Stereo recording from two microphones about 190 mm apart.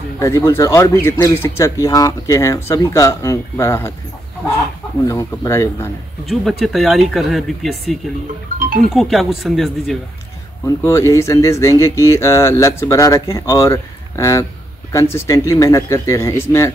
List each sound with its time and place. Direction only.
0.2 s speech: 15° left (ahead or behind)
5.0 s speech: 15° left (ahead or behind)
6.2 s speech: centre (ahead or behind)
10.8 s speech: 15° left (ahead or behind)